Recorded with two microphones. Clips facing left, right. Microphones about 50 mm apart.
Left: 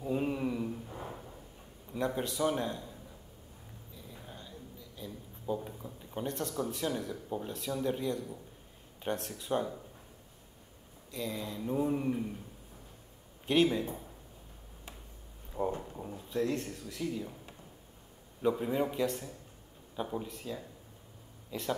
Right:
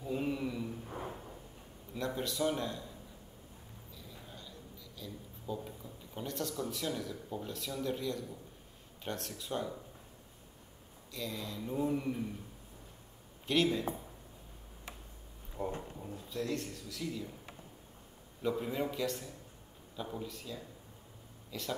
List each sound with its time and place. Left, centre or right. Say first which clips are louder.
0.0 s a sound: left 3 dB; centre
2.0 s a man's voice: left 3 dB; left
4.1 s a sound: left 3 dB; left
5.8 s speech: left 5 dB; left
11.1 s a man's voice: left 3 dB; left
13.5 s speech: left 3 dB; centre
15.6 s speech: left 5 dB; left
17.0 s speech: left 4 dB; left
18.4 s speech: left 4 dB; centre